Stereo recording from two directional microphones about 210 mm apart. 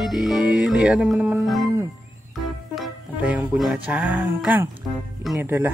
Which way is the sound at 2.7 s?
5° right (ahead or behind).